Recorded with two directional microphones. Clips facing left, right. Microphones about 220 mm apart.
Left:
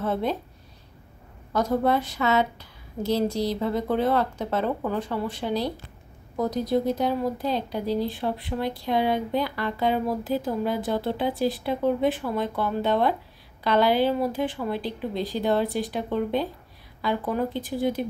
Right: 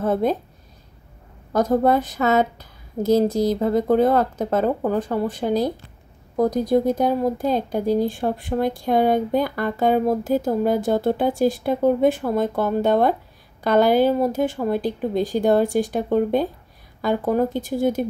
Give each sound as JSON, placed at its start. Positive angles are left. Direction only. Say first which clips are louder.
{"t": 0.0, "sound": "speech", "louder": "right 6 dB", "side_deg": -45}
{"t": 1.5, "sound": "speech", "louder": "right 5 dB", "side_deg": -45}